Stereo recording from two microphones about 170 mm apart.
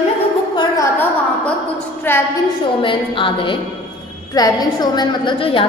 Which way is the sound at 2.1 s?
10° left (ahead or behind).